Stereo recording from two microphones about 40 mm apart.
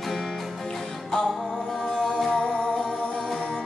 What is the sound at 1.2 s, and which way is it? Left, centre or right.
Music, centre.